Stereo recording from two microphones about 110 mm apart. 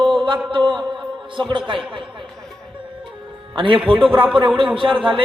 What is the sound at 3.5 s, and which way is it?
Speech, 50° right (ahead or behind).